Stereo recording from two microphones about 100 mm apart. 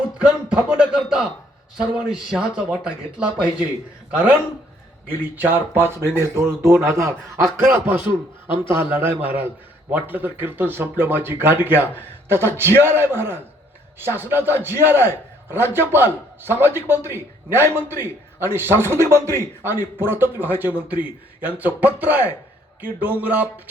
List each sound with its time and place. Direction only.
0.2 s a man's voice: 10° right (ahead or behind)
5.4 s a man's voice: 20° right (ahead or behind)